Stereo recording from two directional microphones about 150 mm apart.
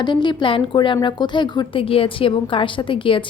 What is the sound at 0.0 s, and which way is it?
Speech, 30° left (ahead or behind).